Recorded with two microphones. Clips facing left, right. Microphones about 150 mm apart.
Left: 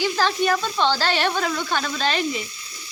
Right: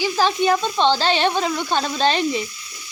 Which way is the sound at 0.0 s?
15° right (ahead or behind).